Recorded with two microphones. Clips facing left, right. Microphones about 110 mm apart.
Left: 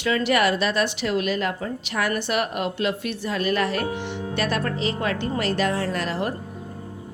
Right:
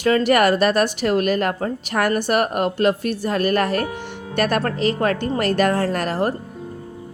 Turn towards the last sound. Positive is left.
turn(degrees=-45)  # may be behind; listen again after turning